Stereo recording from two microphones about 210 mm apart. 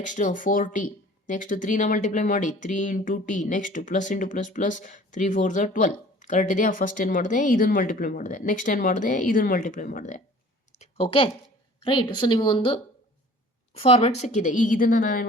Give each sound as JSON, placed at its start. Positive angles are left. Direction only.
{"t": 0.0, "sound": "speech", "side_deg": 35}
{"t": 10.8, "sound": "a sound", "side_deg": 25}
{"t": 11.8, "sound": "a woman's voice", "side_deg": 25}